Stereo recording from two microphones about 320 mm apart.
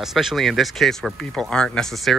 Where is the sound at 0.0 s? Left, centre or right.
Centre.